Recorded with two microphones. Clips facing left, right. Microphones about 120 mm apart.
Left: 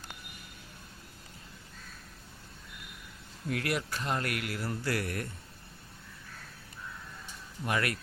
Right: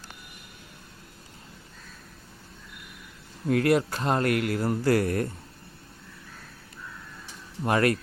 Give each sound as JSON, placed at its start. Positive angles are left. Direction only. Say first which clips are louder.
{"t": 3.4, "sound": "a man's voice", "louder": "right 11 dB", "side_deg": -35}
{"t": 7.6, "sound": "a man's voice", "louder": "right 9 dB", "side_deg": -35}